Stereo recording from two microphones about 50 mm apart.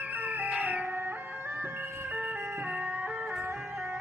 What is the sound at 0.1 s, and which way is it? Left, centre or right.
Music, right.